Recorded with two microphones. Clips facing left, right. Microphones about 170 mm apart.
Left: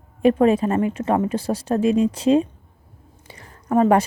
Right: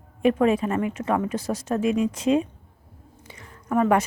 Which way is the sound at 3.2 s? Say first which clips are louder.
Left 4 dB; 35° left (ahead or behind).